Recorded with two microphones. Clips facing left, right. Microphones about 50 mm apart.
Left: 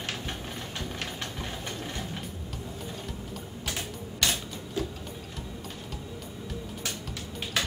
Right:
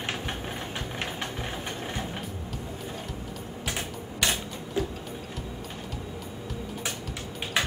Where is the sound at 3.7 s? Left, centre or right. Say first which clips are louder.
Right 2 dB; centre.